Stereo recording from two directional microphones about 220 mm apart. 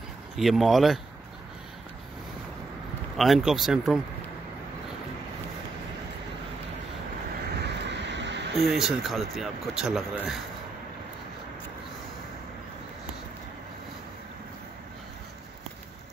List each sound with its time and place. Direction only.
0.4 s speech: centre (ahead or behind)
3.2 s speech: centre (ahead or behind)
7.6 s a sound: 50° right (ahead or behind)
8.5 s speech: centre (ahead or behind)